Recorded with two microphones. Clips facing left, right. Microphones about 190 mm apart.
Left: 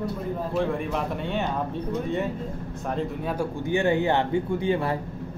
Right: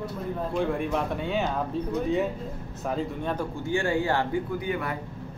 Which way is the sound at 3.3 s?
20° left (ahead or behind).